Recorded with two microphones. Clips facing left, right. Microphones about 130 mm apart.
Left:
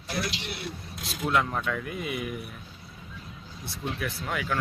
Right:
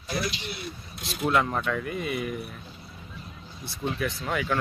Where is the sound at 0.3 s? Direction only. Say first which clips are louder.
Right 1 dB; 85° left.